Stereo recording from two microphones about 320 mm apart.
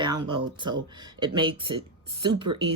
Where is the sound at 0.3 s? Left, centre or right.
Centre.